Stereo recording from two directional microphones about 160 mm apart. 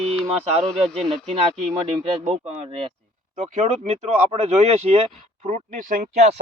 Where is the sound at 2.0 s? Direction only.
40° right (ahead or behind).